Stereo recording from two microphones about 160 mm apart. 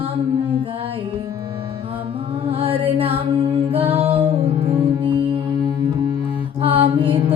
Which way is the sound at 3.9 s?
35° right (ahead or behind).